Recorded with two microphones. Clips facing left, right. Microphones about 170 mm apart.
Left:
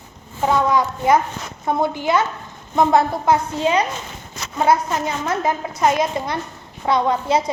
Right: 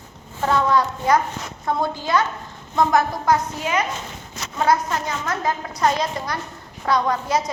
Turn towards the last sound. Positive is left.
turn(degrees=25)  # may be behind; listen again after turning